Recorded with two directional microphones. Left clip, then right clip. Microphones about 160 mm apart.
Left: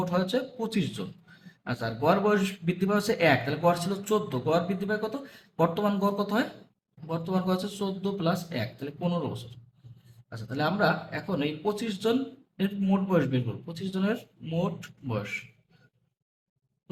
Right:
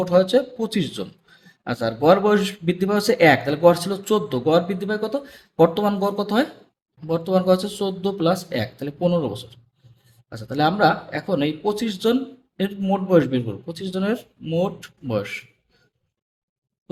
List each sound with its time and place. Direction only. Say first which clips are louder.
0.0 s speech: right 11 dB; 40° right (ahead or behind)